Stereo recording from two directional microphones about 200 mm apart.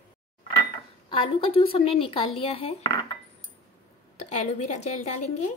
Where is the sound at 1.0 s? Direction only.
25° left (ahead or behind).